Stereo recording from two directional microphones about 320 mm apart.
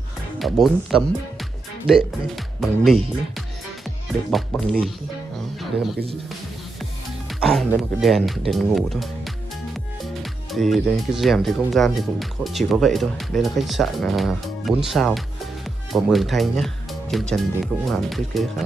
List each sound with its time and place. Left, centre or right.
0.4 s speech: centre
7.2 s speech: centre